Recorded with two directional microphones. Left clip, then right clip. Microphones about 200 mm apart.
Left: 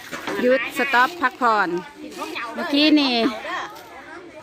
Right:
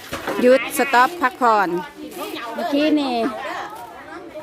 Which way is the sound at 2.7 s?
20° left (ahead or behind).